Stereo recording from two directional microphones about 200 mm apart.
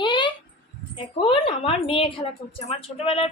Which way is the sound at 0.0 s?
25° left (ahead or behind).